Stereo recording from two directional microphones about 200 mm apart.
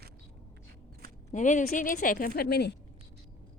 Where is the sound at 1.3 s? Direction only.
40° left (ahead or behind).